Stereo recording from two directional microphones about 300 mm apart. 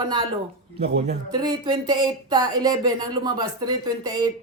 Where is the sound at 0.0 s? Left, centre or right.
Centre.